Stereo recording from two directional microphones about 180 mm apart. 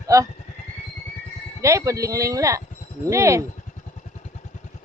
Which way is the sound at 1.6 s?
15° right (ahead or behind).